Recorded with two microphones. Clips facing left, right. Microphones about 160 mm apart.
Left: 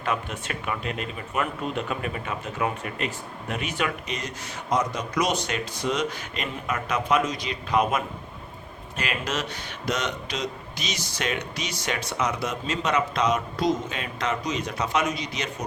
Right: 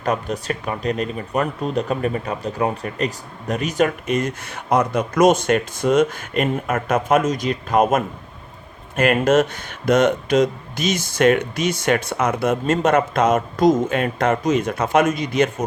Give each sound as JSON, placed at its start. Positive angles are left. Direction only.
{"t": 0.0, "sound": "speech", "side_deg": -40}